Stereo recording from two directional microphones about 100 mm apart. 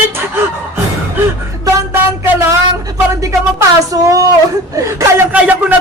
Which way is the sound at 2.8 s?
35° right (ahead or behind).